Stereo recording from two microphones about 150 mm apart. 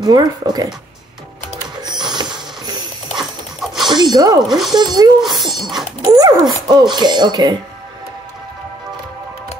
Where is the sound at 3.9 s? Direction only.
25° right (ahead or behind).